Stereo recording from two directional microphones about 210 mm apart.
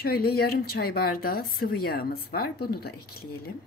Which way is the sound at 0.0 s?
45° left (ahead or behind).